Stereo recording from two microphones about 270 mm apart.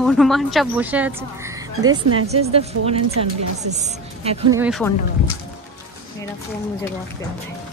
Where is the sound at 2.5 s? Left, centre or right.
Right.